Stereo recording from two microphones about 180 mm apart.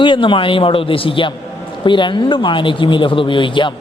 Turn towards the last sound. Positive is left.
turn(degrees=25)  # may be behind; listen again after turning